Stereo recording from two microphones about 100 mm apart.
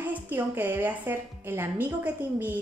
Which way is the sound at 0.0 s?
15° right (ahead or behind).